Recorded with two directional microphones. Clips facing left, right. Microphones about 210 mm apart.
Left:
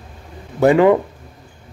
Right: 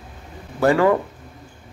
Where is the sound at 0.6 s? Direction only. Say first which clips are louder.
Left 4 dB; 20° left (ahead or behind).